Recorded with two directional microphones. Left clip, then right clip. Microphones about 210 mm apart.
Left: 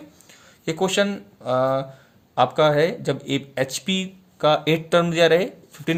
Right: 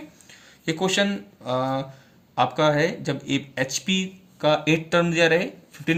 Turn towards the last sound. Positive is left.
turn(degrees=50)  # may be behind; listen again after turning